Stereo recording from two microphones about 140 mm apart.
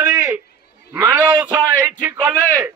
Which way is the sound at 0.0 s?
10° right (ahead or behind).